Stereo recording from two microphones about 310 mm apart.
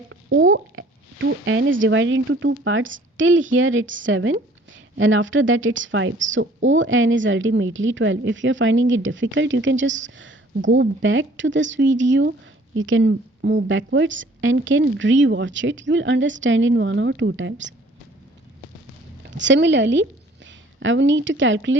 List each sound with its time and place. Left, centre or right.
0.1 s a sound: right
1.5 s a woman's voice: right
19.3 s a woman's voice: right